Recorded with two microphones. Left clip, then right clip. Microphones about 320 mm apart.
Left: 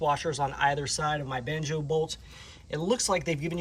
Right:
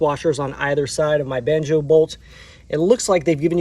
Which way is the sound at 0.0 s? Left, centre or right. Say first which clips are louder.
Right 8 dB; centre.